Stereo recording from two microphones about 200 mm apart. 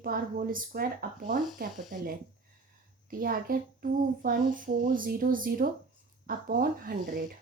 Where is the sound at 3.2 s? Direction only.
45° right (ahead or behind).